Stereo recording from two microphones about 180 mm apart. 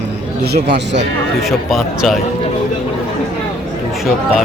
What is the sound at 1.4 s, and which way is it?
Speech, centre (ahead or behind).